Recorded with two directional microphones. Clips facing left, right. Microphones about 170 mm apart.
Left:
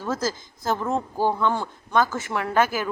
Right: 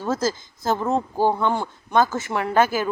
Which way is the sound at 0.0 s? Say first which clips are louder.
Right 3 dB; 25° right (ahead or behind).